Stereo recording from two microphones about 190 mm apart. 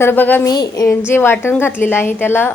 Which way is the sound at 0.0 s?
10° left (ahead or behind).